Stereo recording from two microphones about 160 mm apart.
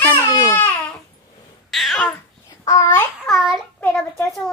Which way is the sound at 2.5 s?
20° left (ahead or behind).